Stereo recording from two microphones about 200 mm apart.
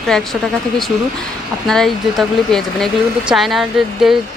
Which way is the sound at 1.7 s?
Centre (ahead or behind).